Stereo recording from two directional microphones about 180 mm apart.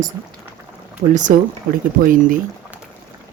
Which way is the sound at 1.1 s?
45° right (ahead or behind).